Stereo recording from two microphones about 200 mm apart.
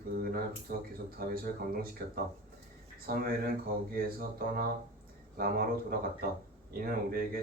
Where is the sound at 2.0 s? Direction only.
50° right (ahead or behind).